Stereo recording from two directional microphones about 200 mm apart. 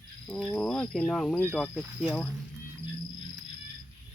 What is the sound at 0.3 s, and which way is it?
Speech, 5° left (ahead or behind).